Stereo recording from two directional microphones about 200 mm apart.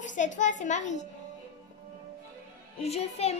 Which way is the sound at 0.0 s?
40° left (ahead or behind).